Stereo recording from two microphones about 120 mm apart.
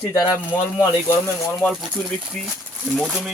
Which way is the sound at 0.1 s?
30° left (ahead or behind).